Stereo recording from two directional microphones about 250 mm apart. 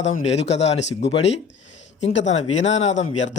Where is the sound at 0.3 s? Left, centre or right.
Left.